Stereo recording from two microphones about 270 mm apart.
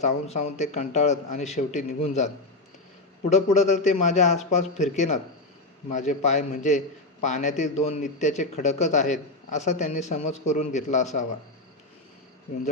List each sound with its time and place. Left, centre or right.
0.0 s a man's voice: left